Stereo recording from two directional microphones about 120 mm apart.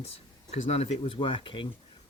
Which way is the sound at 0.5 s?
65° left (ahead or behind).